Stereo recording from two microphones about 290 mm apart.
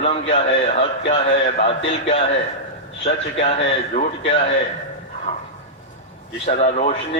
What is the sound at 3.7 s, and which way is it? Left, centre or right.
Speech, centre.